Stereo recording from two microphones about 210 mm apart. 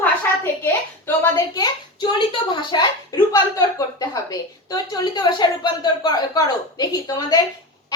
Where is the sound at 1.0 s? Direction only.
15° left (ahead or behind).